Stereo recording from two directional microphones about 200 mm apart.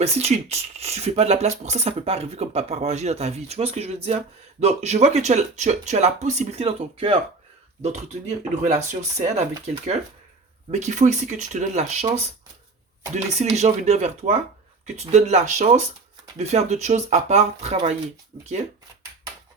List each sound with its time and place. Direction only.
0.0 s speech: 30° right (ahead or behind)
10.7 s speech: 35° right (ahead or behind)